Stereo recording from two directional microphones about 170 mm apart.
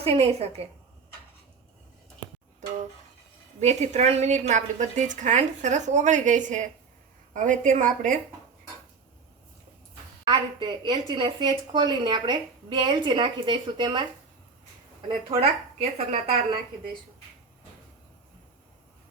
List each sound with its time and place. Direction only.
0.0 s a woman's voice: 35° right (ahead or behind)
3.6 s a woman's voice: 40° right (ahead or behind)
10.2 s a woman's voice: 25° right (ahead or behind)
15.3 s a woman's voice: 35° right (ahead or behind)